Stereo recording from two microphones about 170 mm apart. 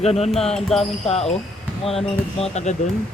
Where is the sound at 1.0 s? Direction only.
35° left (ahead or behind).